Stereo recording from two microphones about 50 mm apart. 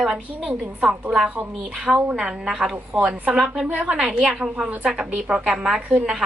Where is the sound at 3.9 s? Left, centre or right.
Centre.